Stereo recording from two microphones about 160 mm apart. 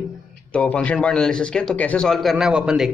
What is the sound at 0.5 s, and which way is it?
Speech, 10° left (ahead or behind).